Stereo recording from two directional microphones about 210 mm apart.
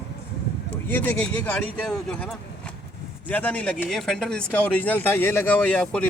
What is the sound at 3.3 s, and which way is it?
Speech, 5° left (ahead or behind).